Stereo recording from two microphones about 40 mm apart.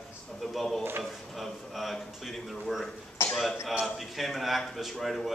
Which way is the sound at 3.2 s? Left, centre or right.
Left.